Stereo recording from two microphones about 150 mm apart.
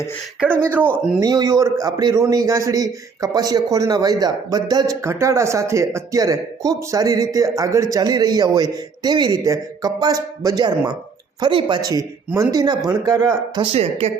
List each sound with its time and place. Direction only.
0.6 s speech: 15° right (ahead or behind)
1.2 s a man's voice: 25° right (ahead or behind)